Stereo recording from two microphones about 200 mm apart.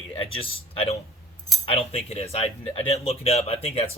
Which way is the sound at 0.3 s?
30° left (ahead or behind).